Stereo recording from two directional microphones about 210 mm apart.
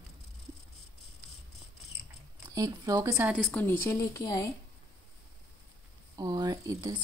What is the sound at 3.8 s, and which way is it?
Speech, 15° left (ahead or behind).